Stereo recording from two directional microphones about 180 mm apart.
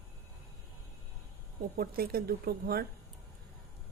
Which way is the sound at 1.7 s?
55° right (ahead or behind).